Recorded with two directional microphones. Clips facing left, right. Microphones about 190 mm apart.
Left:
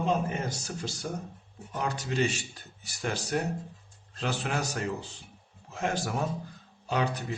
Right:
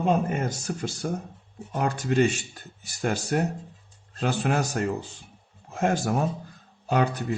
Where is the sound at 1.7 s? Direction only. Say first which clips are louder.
Right 7 dB; 50° right (ahead or behind).